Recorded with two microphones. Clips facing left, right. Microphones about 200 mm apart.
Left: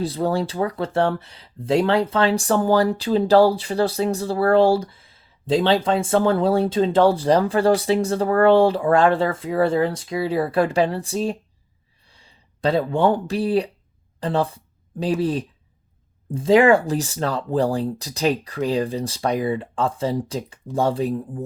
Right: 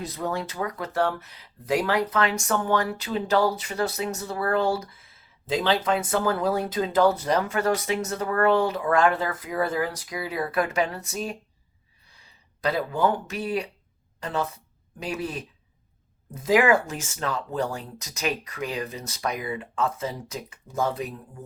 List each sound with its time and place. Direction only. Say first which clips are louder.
0.0 s speech: left 8 dB; 30° left (ahead or behind)